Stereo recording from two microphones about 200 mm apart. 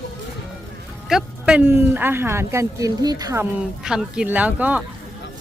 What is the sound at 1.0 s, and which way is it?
Speech, 5° right (ahead or behind).